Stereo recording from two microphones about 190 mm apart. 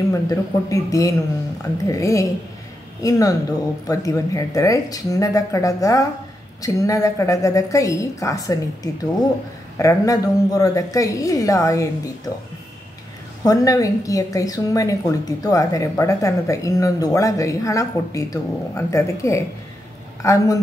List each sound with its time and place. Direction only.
0.1 s speech: 15° left (ahead or behind)
13.4 s a woman's voice: 20° left (ahead or behind)